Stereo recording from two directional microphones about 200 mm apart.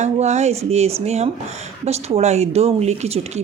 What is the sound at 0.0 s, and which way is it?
Speech, 35° right (ahead or behind).